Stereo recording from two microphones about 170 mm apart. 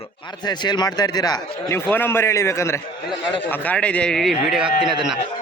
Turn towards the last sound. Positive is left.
turn(degrees=-30)  # may be behind; listen again after turning